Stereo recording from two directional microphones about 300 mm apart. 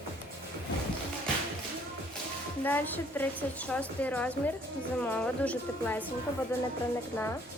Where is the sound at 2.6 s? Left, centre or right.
Centre.